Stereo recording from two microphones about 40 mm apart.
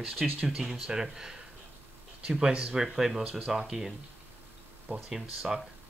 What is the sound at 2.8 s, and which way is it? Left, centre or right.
Speech, centre.